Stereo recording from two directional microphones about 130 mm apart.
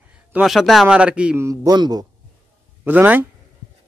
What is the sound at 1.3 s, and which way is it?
Speech, 20° right (ahead or behind).